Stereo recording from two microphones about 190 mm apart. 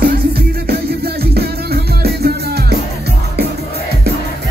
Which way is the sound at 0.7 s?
55° right (ahead or behind).